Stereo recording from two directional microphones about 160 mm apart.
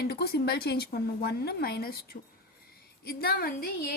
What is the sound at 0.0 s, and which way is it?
A woman's voice, 90° left.